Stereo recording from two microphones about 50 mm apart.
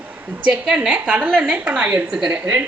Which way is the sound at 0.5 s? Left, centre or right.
Centre.